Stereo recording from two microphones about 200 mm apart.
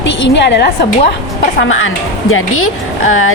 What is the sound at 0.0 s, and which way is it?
Speech, 60° left (ahead or behind).